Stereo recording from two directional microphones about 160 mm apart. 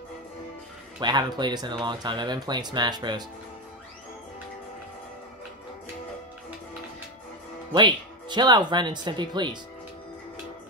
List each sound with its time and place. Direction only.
0.9 s speech: 25° right (ahead or behind)
7.7 s speech: 30° right (ahead or behind)